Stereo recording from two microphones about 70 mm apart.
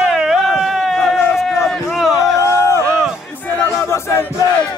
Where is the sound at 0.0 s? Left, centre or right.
Centre.